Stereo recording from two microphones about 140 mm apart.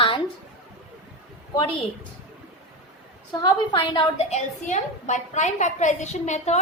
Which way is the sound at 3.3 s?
35° left (ahead or behind).